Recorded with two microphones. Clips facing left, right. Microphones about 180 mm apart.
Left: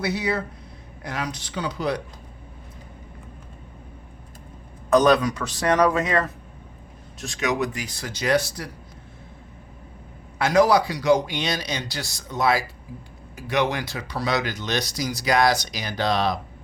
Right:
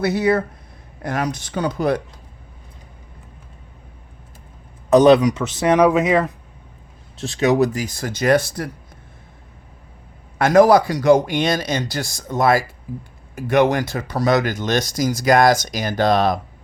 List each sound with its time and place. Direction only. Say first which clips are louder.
0.0 s speech: right 7 dB; 50° right (ahead or behind)
4.9 s speech: right 6 dB; 25° right (ahead or behind)
7.2 s speech: right 8 dB; 30° right (ahead or behind); by 8.7 s 50° right (ahead or behind)
10.3 s speech: right 6 dB; 50° right (ahead or behind)